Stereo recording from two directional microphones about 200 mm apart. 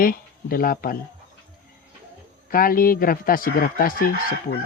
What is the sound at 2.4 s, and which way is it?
Speech, 45° left (ahead or behind).